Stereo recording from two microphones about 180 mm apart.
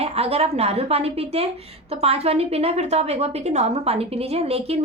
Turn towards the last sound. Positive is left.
turn(degrees=-35)  # may be behind; listen again after turning